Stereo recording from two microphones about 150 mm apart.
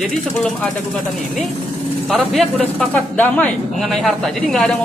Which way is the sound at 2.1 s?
5° left (ahead or behind).